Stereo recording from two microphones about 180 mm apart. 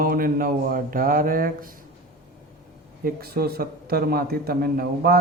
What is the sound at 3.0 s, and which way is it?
A man's voice, 60° right (ahead or behind).